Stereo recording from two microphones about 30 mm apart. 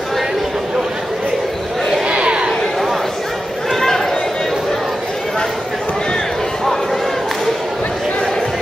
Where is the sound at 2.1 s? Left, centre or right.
Right.